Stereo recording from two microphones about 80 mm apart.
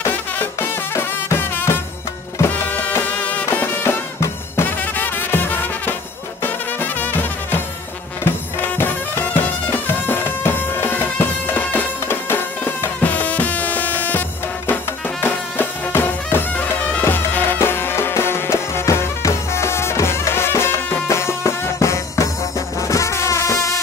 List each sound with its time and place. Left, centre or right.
0.1 s music: left
16.5 s music: centre; by 22.3 s left
22.8 s insect: left